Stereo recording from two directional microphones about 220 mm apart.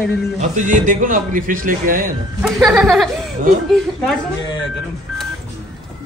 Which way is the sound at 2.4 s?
Centre (ahead or behind).